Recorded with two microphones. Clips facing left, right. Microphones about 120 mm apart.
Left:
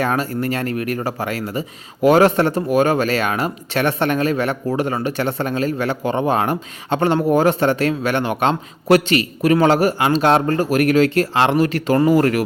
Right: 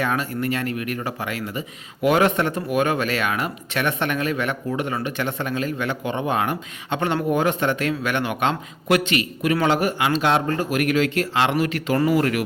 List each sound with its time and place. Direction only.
0.0 s speech: 35° left (ahead or behind)